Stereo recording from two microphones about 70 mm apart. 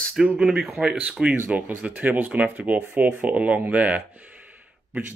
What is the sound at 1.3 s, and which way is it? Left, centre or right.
Speech, right.